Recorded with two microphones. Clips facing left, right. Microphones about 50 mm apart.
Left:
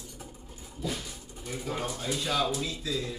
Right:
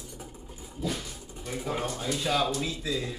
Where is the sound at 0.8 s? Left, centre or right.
Centre.